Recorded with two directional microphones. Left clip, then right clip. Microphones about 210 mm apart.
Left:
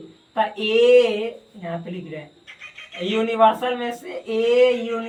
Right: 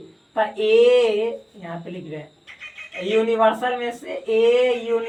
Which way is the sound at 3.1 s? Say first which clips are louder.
Left 1 dB; 20° right (ahead or behind).